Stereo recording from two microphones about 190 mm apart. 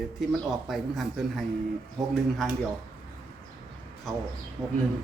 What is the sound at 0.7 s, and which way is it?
Speech, centre (ahead or behind).